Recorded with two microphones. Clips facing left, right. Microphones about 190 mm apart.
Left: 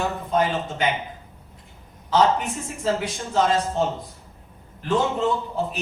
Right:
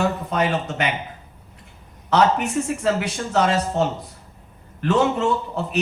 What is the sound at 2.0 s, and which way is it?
A man's voice, 75° right (ahead or behind).